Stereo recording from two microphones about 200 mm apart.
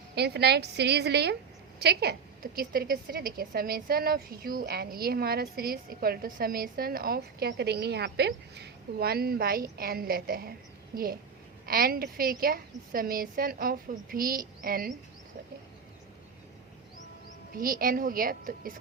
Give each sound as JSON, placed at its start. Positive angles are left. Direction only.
{"t": 0.2, "sound": "a woman's voice", "side_deg": -55}
{"t": 17.5, "sound": "a woman's voice", "side_deg": -45}